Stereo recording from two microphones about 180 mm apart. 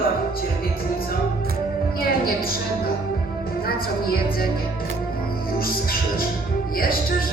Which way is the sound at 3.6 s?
60° left (ahead or behind).